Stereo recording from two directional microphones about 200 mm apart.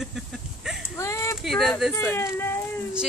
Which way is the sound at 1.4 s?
Centre (ahead or behind).